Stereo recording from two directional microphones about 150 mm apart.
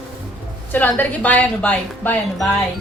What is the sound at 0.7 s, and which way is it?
Speech, 10° left (ahead or behind).